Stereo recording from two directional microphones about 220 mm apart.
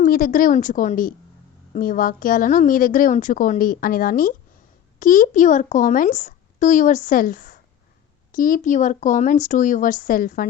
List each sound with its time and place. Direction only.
0.0 s a woman's voice: 40° left (ahead or behind)